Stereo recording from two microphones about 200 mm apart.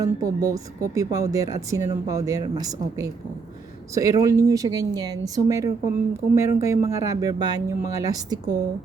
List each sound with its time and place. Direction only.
0.0 s speech: 15° right (ahead or behind)